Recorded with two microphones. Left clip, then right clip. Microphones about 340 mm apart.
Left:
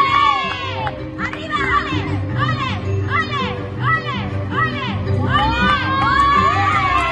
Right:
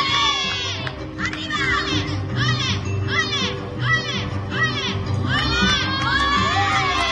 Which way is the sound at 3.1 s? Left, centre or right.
Centre.